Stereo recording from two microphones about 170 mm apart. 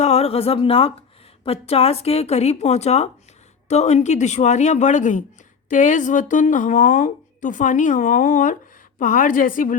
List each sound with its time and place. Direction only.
0.0 s a woman's voice: 40° left (ahead or behind); by 9.7 s 55° left (ahead or behind)